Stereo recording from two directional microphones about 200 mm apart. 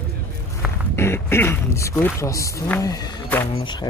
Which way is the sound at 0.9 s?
10° left (ahead or behind).